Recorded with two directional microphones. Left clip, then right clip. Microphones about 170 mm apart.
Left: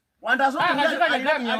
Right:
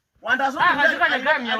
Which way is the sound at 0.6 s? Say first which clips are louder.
Right 3 dB; 60° left (ahead or behind).